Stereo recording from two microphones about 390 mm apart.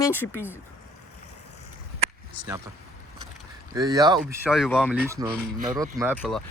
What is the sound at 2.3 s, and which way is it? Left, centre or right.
Speech, centre.